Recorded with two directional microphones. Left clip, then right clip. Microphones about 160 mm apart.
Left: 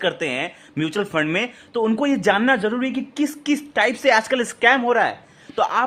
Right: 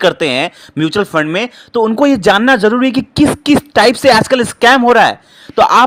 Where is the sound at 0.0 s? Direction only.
45° right (ahead or behind).